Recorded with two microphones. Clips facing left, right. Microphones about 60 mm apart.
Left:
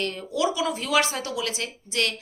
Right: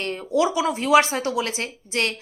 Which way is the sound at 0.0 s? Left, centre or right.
Right.